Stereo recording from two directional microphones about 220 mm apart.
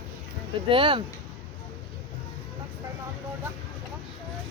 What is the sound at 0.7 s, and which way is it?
Speech, 25° right (ahead or behind).